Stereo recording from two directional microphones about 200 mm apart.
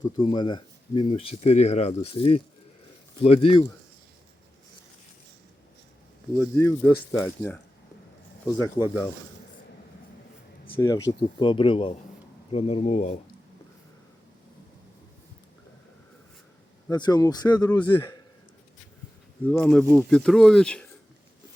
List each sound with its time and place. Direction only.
0.2 s speech: 25° left (ahead or behind)
6.3 s speech: 10° left (ahead or behind)
10.8 s speech: 15° left (ahead or behind); by 13.1 s 35° left (ahead or behind)
16.9 s speech: 20° left (ahead or behind)
19.5 s speech: 10° left (ahead or behind)